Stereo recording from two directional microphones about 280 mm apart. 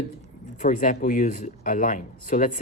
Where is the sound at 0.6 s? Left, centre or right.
Left.